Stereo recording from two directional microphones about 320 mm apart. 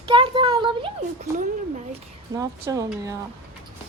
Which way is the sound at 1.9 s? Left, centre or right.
Centre.